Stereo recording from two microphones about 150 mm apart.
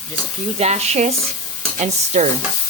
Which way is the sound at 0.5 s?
45° right (ahead or behind).